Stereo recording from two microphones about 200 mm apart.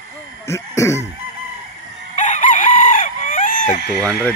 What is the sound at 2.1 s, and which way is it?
Chicken, 35° left (ahead or behind).